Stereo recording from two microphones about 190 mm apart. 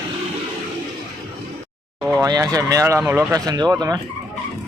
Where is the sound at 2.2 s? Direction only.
20° right (ahead or behind).